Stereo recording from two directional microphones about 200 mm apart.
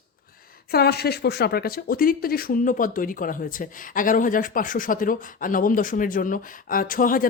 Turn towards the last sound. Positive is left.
turn(degrees=45)  # may be behind; listen again after turning